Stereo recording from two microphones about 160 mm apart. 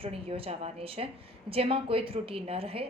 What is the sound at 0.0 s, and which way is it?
A woman's voice, 35° right (ahead or behind).